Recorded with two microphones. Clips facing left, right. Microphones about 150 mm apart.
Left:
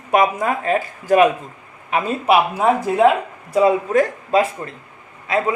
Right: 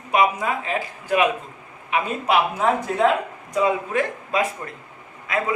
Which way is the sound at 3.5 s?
35° left (ahead or behind).